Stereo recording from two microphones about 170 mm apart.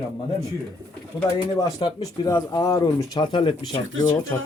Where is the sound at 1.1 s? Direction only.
20° left (ahead or behind).